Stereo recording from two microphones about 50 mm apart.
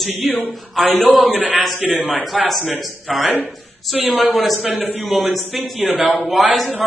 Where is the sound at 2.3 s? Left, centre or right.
Centre.